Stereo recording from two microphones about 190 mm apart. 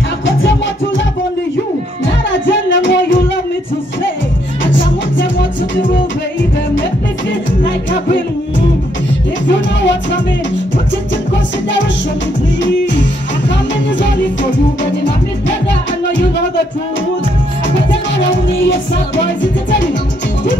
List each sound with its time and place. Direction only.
0.4 s music: 80° left
2.7 s music: 75° left (ahead or behind)
4.6 s music: 75° left (ahead or behind)
9.5 s music: 70° left (ahead or behind)